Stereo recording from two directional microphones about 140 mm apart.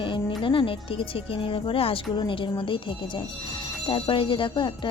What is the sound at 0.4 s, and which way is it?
A woman's voice, 40° left (ahead or behind).